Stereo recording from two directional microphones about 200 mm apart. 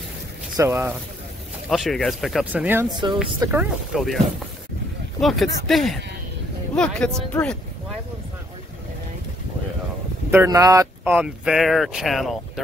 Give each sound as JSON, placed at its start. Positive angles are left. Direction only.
{"t": 0.6, "sound": "speech", "side_deg": -10}
{"t": 1.7, "sound": "speech", "side_deg": 0}
{"t": 5.2, "sound": "speech", "side_deg": 0}
{"t": 10.3, "sound": "speech", "side_deg": -15}
{"t": 11.1, "sound": "speech", "side_deg": -5}